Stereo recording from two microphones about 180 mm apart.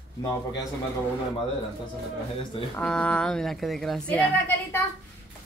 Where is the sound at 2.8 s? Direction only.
5° left (ahead or behind).